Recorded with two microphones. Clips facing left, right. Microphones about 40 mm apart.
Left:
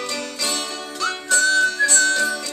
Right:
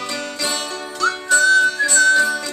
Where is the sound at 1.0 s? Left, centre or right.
Centre.